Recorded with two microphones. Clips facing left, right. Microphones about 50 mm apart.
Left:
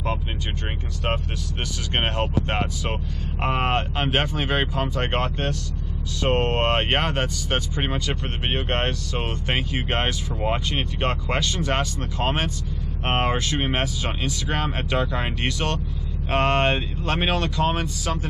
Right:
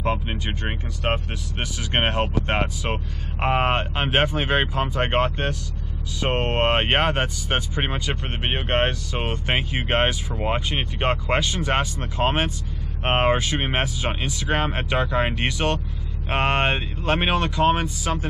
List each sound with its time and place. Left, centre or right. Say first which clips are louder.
0.7 s speech: right 2 dB; centre